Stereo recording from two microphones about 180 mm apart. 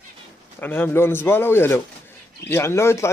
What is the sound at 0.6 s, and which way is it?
Speech, 10° left (ahead or behind).